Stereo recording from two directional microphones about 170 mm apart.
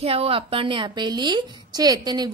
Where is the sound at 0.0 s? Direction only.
35° right (ahead or behind).